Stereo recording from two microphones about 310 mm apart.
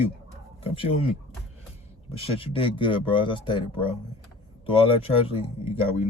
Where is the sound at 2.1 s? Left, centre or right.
Centre.